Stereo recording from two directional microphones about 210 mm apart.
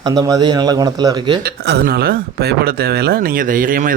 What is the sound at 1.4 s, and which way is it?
Speech, 50° right (ahead or behind).